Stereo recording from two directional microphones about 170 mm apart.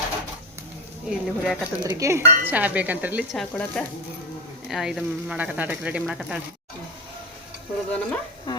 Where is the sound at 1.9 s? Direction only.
15° right (ahead or behind).